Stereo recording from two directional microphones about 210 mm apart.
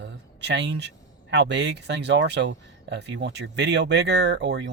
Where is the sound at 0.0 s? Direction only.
55° right (ahead or behind).